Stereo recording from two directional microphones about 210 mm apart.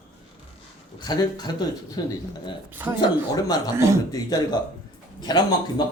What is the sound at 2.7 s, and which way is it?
Speech, 10° right (ahead or behind).